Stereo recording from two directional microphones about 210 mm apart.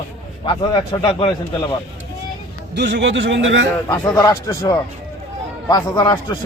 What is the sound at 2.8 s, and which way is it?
Speech, 55° right (ahead or behind).